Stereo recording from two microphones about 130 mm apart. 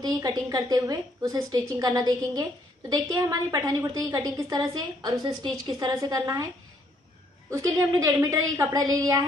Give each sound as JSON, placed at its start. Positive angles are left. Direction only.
{"t": 0.0, "sound": "a woman's voice", "side_deg": -30}
{"t": 7.4, "sound": "a woman's voice", "side_deg": -25}